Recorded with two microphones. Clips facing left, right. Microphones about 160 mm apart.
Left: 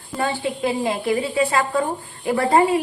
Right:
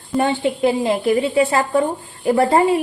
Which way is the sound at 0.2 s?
25° right (ahead or behind).